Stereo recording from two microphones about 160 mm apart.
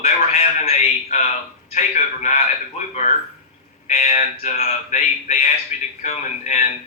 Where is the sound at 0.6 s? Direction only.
40° left (ahead or behind).